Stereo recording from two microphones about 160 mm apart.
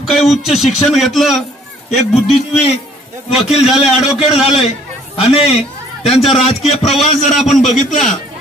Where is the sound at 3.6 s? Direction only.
5° right (ahead or behind).